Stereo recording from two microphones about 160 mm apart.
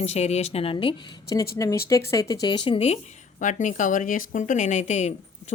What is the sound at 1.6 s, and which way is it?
A woman's voice, 20° left (ahead or behind).